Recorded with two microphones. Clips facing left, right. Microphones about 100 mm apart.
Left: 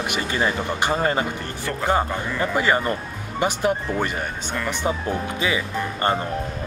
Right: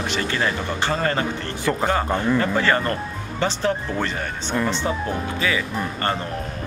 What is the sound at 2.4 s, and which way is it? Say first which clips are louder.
Speech: even; 15° left (ahead or behind).